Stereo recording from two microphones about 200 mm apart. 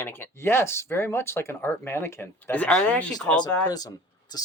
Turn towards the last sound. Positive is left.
turn(degrees=20)  # may be behind; listen again after turning